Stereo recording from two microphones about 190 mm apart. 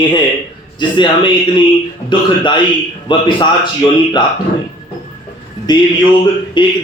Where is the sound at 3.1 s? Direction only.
25° left (ahead or behind).